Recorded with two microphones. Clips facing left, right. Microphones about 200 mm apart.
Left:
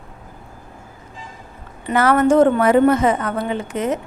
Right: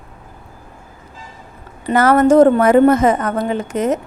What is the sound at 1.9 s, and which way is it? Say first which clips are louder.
A woman's voice: right 3 dB; 40° right (ahead or behind).